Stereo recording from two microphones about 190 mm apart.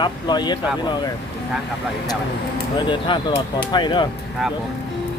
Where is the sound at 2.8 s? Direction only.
25° left (ahead or behind).